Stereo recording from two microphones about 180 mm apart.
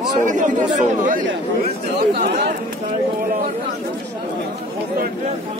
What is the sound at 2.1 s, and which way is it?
Speech, 60° right (ahead or behind).